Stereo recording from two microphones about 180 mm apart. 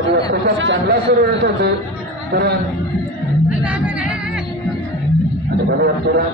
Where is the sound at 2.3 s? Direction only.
65° right (ahead or behind).